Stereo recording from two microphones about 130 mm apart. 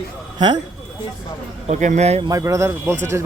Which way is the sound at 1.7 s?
70° right (ahead or behind).